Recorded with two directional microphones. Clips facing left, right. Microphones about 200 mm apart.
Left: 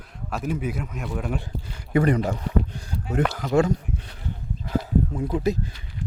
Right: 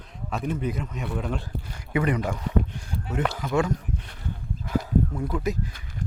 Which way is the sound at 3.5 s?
35° left (ahead or behind).